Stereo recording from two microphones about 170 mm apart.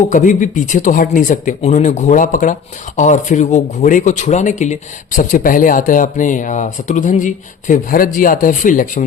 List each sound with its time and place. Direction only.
0.1 s speech: 50° left (ahead or behind)